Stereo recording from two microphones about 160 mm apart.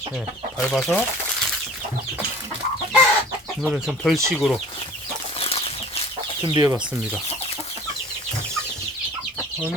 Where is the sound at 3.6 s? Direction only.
5° right (ahead or behind).